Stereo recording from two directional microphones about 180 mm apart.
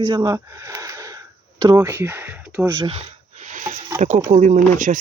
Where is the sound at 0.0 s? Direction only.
25° right (ahead or behind).